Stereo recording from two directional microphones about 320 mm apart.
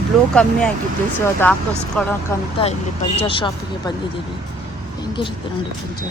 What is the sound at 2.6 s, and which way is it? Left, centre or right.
Speech, centre.